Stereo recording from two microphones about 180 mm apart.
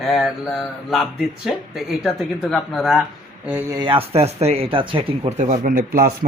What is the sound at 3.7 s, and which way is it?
Speech, 25° right (ahead or behind).